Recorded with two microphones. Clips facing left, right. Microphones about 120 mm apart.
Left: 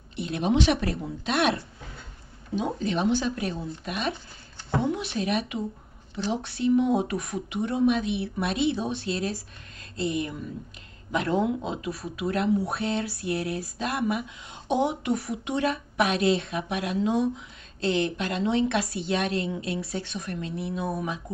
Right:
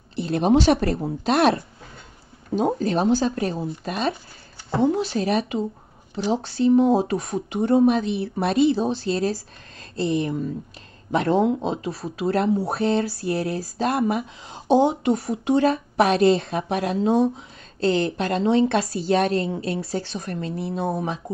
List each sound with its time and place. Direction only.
0.1 s speech: 35° right (ahead or behind)